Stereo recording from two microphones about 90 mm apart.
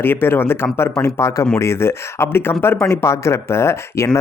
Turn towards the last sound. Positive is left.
turn(degrees=30)  # may be behind; listen again after turning